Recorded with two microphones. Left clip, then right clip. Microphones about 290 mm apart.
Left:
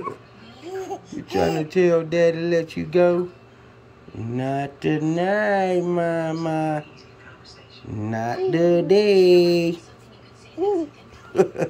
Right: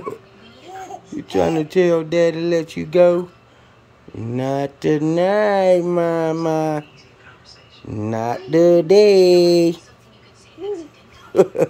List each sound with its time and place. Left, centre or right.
1.1 s speech: centre
4.2 s speech: centre
7.9 s speech: centre